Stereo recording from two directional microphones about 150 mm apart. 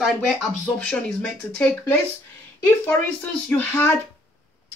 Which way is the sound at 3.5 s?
10° left (ahead or behind).